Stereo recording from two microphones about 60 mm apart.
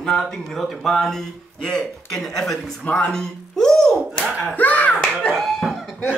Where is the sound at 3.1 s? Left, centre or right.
Centre.